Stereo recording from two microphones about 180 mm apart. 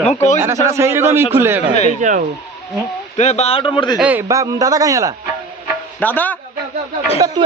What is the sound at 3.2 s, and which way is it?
Speech, 40° left (ahead or behind).